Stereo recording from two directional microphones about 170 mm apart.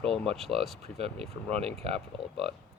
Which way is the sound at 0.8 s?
35° right (ahead or behind).